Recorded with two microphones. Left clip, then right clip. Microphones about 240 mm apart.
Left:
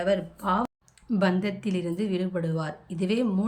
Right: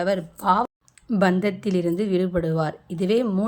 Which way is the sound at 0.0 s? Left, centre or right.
Right.